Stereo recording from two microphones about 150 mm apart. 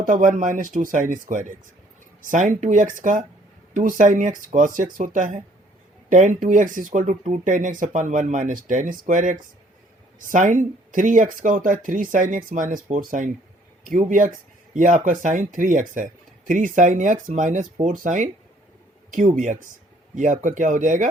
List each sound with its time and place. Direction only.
0.0 s speech: 65° right (ahead or behind)